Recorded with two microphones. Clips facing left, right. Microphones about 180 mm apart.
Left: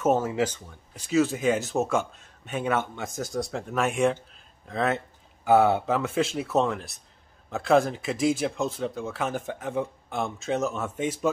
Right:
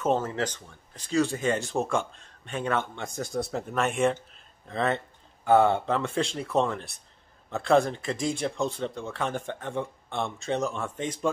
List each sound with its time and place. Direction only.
0.0 s speech: 10° left (ahead or behind)